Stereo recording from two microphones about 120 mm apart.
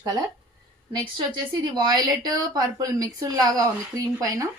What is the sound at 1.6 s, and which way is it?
A woman's voice, 35° right (ahead or behind).